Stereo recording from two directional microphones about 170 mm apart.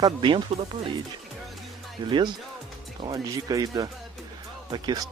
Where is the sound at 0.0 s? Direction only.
30° right (ahead or behind).